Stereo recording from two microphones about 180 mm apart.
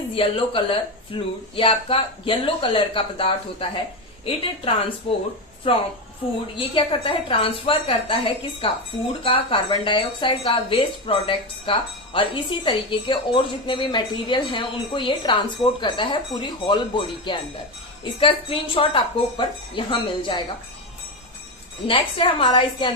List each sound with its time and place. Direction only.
0.1 s a woman's voice: 30° left (ahead or behind)
6.6 s a woman's voice: 30° left (ahead or behind)
21.8 s a woman's voice: 30° left (ahead or behind)